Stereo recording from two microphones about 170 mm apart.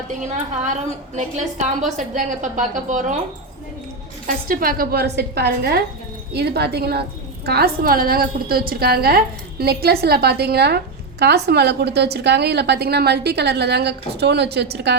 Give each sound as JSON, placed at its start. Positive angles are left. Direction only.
{"t": 0.2, "sound": "a woman's voice", "side_deg": -45}
{"t": 4.4, "sound": "a woman's voice", "side_deg": -60}